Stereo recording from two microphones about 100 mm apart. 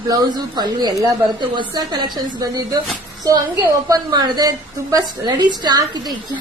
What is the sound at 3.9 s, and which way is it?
A woman's voice, 45° right (ahead or behind).